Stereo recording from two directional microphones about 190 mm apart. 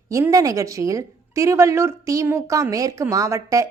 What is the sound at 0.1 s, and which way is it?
A woman's voice, 15° right (ahead or behind).